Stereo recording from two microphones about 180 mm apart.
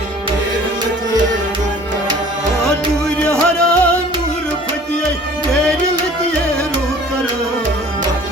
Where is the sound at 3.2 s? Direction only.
5° left (ahead or behind).